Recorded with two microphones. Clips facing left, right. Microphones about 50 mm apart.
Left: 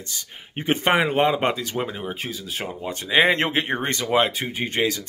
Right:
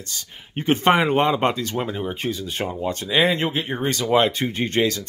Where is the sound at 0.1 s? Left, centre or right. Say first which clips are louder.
Right 3 dB; centre.